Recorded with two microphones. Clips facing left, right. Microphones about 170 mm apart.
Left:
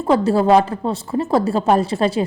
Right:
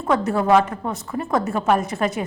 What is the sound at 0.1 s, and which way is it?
A woman's voice, 30° left (ahead or behind).